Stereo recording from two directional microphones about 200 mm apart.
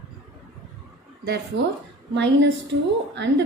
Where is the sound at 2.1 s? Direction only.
60° right (ahead or behind).